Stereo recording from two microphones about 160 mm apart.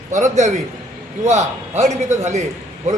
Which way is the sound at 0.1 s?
50° right (ahead or behind).